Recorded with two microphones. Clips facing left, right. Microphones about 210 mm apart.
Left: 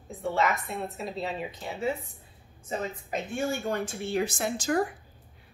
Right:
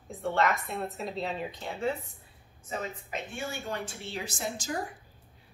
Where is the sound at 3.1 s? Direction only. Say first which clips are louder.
Left 10 dB; 45° left (ahead or behind); by 4.8 s 65° left (ahead or behind).